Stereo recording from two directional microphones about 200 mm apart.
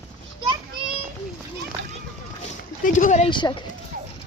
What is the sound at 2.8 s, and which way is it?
Speech, 40° left (ahead or behind).